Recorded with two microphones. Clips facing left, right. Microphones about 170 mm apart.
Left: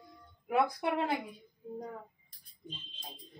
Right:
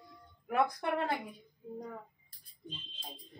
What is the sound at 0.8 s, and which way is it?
Speech, 20° left (ahead or behind).